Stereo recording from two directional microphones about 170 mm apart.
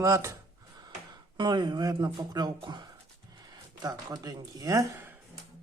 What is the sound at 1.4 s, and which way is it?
Speech, 25° right (ahead or behind).